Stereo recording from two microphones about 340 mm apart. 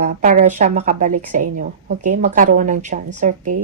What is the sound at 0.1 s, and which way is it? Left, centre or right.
A woman's voice, right.